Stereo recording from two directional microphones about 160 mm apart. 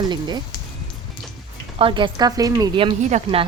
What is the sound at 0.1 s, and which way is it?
Speech, 25° right (ahead or behind).